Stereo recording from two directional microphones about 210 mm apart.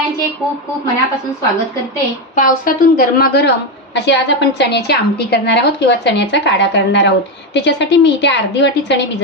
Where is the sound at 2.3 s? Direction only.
40° left (ahead or behind).